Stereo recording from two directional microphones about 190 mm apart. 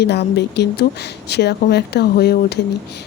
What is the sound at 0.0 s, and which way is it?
Speech, 60° left (ahead or behind).